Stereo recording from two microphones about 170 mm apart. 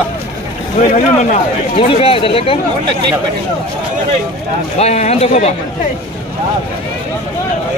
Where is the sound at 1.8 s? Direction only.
35° left (ahead or behind).